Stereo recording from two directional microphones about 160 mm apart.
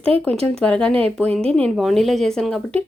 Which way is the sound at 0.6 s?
5° left (ahead or behind).